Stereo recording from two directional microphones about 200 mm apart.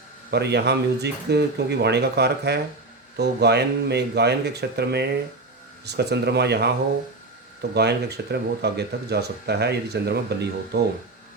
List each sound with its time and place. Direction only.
0.3 s speech: 55° right (ahead or behind)